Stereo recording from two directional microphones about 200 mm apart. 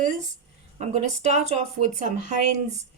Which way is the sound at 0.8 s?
35° right (ahead or behind).